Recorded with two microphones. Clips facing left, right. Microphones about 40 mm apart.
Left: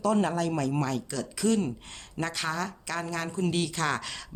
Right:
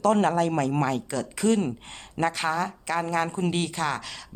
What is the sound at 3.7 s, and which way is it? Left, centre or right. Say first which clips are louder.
Speech: right 1 dB; centre.